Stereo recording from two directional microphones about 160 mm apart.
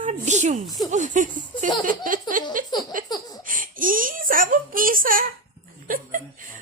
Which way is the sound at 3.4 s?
60° right (ahead or behind).